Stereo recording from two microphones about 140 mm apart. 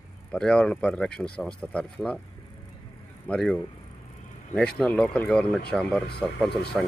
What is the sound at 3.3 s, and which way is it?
Speech, 5° left (ahead or behind).